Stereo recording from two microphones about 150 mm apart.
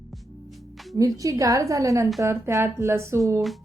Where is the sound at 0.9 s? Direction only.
20° right (ahead or behind).